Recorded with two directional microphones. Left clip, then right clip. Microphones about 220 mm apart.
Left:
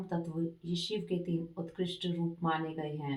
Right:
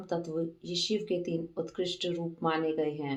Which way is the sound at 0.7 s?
35° right (ahead or behind).